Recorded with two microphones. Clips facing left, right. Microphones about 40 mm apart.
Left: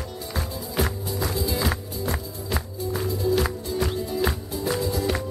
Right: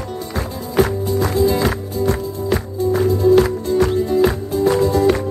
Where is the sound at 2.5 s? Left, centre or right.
Right.